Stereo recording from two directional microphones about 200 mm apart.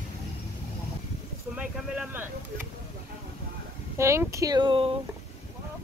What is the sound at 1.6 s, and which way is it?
Speech, 5° right (ahead or behind).